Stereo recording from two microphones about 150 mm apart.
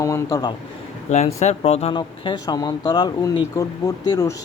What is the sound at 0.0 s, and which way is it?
Speech, 20° left (ahead or behind).